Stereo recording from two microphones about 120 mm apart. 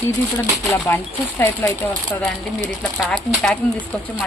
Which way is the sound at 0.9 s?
15° left (ahead or behind).